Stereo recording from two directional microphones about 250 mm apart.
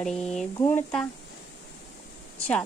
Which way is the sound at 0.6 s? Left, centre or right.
Centre.